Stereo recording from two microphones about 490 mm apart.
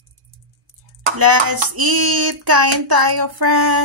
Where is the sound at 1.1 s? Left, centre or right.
Right.